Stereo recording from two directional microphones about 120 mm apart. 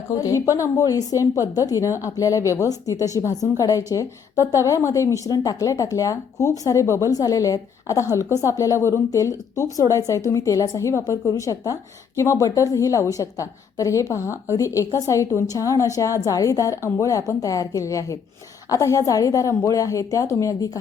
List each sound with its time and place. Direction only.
0.1 s a woman's voice: 30° left (ahead or behind)